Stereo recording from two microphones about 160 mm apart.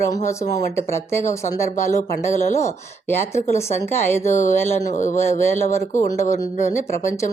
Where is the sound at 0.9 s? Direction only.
15° left (ahead or behind).